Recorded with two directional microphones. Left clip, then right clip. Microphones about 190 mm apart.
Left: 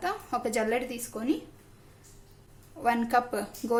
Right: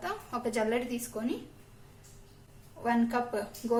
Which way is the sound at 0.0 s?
50° left (ahead or behind).